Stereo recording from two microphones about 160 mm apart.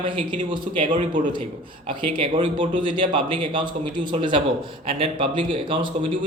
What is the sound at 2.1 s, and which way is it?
Speech, 30° right (ahead or behind).